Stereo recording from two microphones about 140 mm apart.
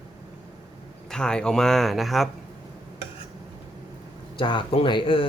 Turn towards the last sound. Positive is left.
turn(degrees=35)  # may be behind; listen again after turning